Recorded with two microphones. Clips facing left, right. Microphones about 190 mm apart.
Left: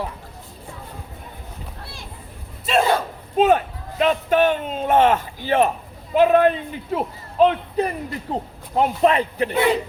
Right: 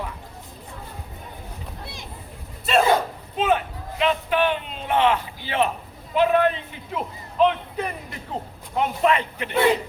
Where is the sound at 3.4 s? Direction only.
45° left (ahead or behind).